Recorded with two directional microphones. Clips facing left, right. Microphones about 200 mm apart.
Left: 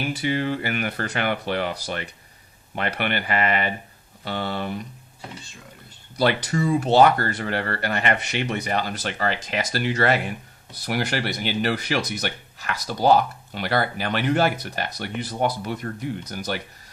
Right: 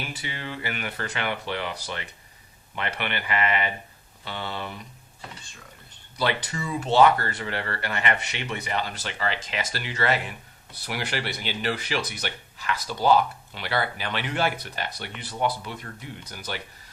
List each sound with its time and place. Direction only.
0.2 s speech: 45° left (ahead or behind)
6.1 s speech: 40° left (ahead or behind)